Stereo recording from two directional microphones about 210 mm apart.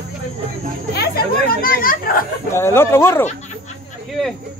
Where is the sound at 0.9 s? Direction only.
45° left (ahead or behind).